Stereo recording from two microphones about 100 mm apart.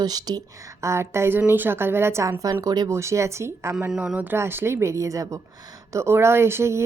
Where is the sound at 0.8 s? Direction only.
25° right (ahead or behind).